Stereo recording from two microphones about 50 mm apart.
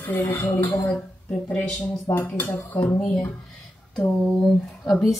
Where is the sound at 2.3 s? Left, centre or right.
Left.